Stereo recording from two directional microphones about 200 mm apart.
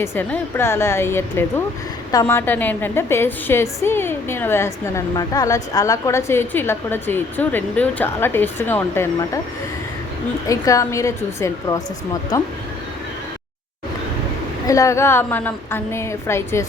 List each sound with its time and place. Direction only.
0.0 s a woman's voice: 10° left (ahead or behind)
10.4 s a woman's voice: 15° left (ahead or behind)
14.7 s a woman's voice: 15° left (ahead or behind)